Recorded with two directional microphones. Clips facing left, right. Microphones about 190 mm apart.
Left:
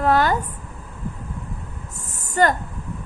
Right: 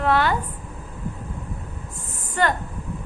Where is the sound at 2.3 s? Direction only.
45° left (ahead or behind).